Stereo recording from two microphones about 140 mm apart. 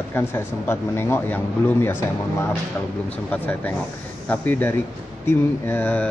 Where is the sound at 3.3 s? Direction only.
10° left (ahead or behind).